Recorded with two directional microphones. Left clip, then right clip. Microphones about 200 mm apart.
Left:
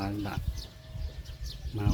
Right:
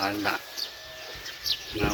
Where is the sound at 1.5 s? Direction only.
65° left (ahead or behind).